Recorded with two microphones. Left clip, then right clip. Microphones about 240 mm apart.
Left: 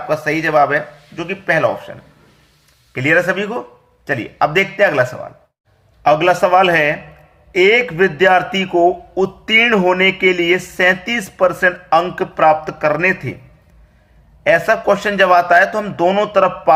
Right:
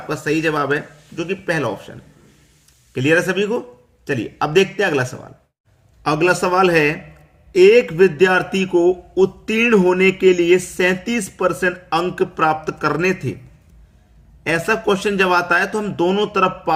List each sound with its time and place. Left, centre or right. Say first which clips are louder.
1.1 s speech: left 4 dB; centre
2.9 s speech: left 2 dB; centre
6.0 s speech: left 5 dB; centre
14.4 s speech: left 5 dB; centre